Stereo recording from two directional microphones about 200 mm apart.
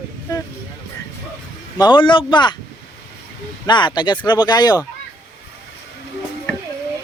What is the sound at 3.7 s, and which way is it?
Speech, 20° left (ahead or behind).